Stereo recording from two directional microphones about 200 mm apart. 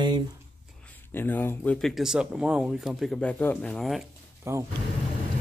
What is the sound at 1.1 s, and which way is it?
Speech, 10° left (ahead or behind).